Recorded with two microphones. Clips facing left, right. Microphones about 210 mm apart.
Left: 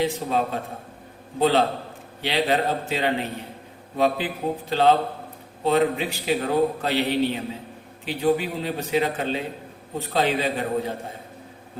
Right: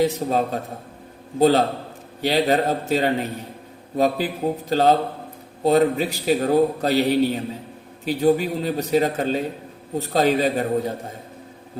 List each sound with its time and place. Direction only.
0.0 s a man's voice: 40° right (ahead or behind)